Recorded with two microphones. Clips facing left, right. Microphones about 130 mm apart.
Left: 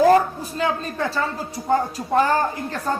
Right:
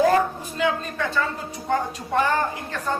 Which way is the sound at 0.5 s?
35° left (ahead or behind).